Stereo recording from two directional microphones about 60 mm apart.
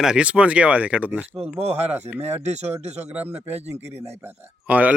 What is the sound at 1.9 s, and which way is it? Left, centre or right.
Speech, right.